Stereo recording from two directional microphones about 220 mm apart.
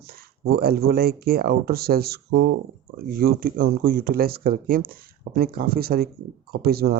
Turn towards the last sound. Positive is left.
turn(degrees=-45)  # may be behind; listen again after turning